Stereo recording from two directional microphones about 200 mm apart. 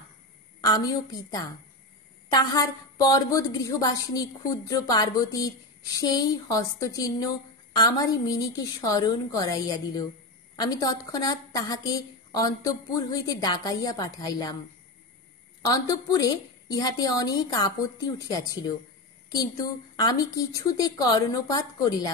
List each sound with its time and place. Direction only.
0.6 s a woman's voice: 20° left (ahead or behind)
15.7 s a woman's voice: 20° left (ahead or behind)
20.0 s a woman's voice: 20° left (ahead or behind)